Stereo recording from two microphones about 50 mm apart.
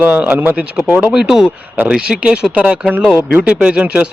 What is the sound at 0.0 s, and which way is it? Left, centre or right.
Speech, right.